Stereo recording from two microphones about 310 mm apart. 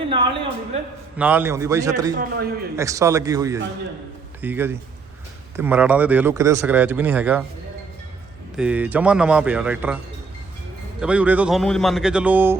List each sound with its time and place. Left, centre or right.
0.1 s a man's voice: centre
1.1 s a man's voice: centre
8.5 s speech: centre
11.0 s speech: centre